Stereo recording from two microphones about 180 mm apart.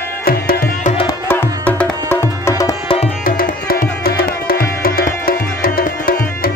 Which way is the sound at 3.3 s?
50° left (ahead or behind).